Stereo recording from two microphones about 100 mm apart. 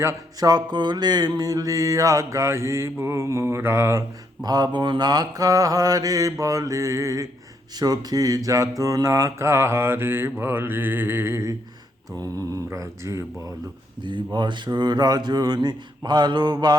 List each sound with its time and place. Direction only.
0.0 s mantra: 30° right (ahead or behind)
0.4 s mantra: 45° right (ahead or behind); by 4.0 s 30° right (ahead or behind)
4.4 s mantra: 45° right (ahead or behind)
14.3 s speech: 50° right (ahead or behind)